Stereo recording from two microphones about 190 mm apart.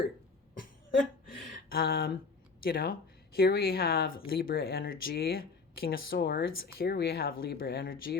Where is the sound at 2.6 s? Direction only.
50° left (ahead or behind).